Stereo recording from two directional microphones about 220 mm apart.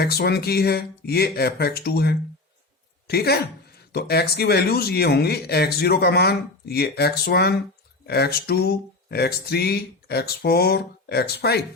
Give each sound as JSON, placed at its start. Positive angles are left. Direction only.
{"t": 0.0, "sound": "speech", "side_deg": 45}